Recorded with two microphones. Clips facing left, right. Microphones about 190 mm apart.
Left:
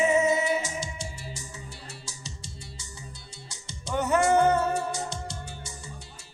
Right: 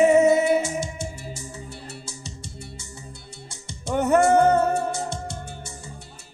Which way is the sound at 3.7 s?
55° right (ahead or behind).